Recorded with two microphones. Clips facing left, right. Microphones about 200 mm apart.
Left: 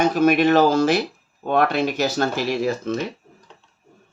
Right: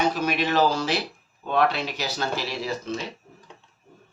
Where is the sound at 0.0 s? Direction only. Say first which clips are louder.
Left 8 dB; 50° left (ahead or behind).